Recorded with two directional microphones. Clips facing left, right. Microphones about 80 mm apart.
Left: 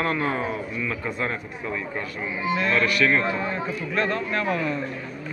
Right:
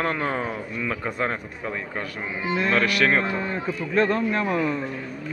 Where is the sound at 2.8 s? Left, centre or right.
Right.